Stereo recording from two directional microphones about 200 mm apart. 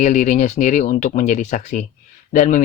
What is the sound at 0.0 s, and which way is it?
Speech, 40° left (ahead or behind).